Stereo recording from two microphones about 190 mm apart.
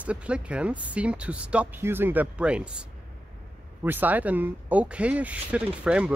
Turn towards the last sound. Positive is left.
turn(degrees=-5)  # may be behind; listen again after turning